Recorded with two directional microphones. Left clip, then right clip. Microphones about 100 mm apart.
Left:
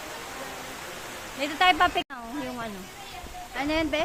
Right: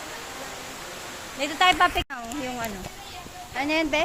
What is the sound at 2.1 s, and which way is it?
Speech, 15° right (ahead or behind).